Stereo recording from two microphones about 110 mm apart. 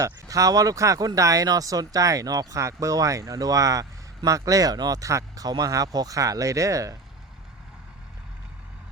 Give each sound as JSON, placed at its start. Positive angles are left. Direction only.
{"t": 0.0, "sound": "speech", "side_deg": -30}